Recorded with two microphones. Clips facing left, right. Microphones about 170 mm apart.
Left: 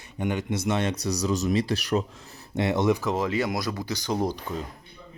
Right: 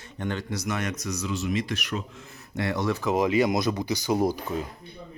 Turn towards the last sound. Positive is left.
turn(degrees=-10)  # may be behind; listen again after turning